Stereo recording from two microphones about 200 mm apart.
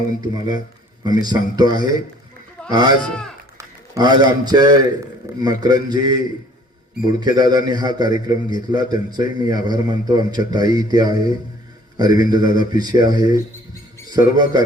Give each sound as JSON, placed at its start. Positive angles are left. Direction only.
{"t": 0.2, "sound": "a man's voice", "side_deg": -20}
{"t": 3.1, "sound": "speech", "side_deg": 5}
{"t": 3.6, "sound": "a man's voice", "side_deg": -20}